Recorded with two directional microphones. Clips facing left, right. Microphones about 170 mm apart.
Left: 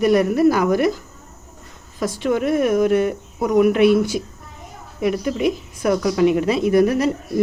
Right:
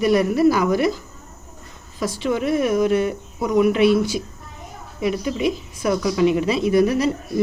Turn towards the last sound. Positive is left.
turn(degrees=50)  # may be behind; listen again after turning